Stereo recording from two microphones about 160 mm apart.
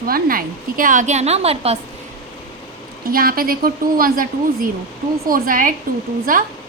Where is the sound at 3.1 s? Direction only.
65° right (ahead or behind).